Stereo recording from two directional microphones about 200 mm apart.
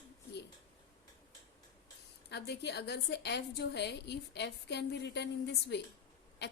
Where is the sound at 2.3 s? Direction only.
55° left (ahead or behind).